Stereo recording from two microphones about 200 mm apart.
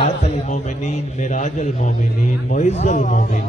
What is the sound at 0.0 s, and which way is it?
A man's voice, 35° left (ahead or behind).